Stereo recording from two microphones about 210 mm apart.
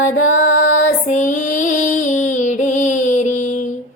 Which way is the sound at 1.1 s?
35° left (ahead or behind).